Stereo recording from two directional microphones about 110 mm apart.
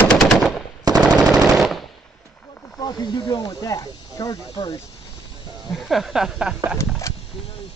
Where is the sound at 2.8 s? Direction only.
35° left (ahead or behind).